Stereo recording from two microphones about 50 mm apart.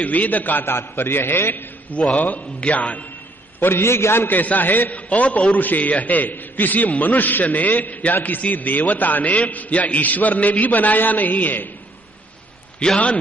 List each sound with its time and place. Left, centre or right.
0.0 s a man's voice: left
0.7 s a man's voice: left
1.9 s a man's voice: left
3.5 s a man's voice: left
4.3 s a man's voice: left
12.8 s a man's voice: left